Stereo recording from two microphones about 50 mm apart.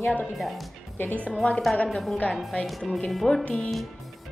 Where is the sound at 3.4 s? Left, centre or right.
Left.